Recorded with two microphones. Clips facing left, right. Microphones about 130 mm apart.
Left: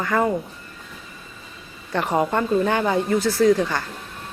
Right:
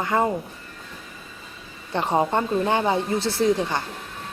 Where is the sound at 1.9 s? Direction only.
25° right (ahead or behind).